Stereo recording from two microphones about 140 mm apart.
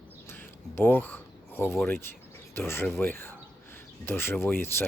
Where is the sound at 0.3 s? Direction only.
15° left (ahead or behind).